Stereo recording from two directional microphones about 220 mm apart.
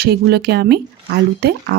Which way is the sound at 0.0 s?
45° right (ahead or behind).